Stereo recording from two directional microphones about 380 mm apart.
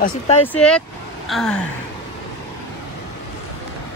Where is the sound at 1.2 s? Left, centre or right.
Centre.